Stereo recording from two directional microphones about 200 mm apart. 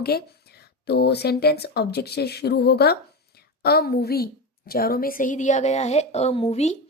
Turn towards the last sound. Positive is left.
turn(degrees=35)  # may be behind; listen again after turning